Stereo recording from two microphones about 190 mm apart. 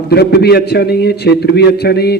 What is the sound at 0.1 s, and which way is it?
A man's voice, 60° left (ahead or behind).